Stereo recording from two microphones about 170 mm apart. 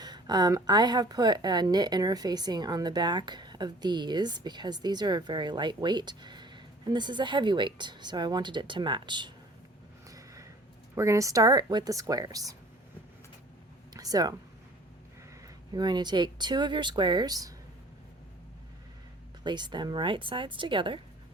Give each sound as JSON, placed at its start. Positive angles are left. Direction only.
{"t": 0.0, "sound": "a woman's voice", "side_deg": -25}
{"t": 10.1, "sound": "a sound", "side_deg": -20}
{"t": 10.9, "sound": "a woman's voice", "side_deg": -15}
{"t": 13.9, "sound": "speech", "side_deg": -20}
{"t": 15.7, "sound": "a woman's voice", "side_deg": -25}
{"t": 19.5, "sound": "a woman's voice", "side_deg": -25}